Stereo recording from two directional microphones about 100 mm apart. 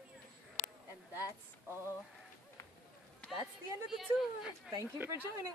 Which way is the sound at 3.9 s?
Centre (ahead or behind).